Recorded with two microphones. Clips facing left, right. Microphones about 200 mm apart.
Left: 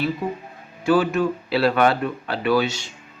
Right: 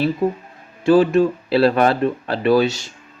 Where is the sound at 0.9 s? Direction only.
30° right (ahead or behind).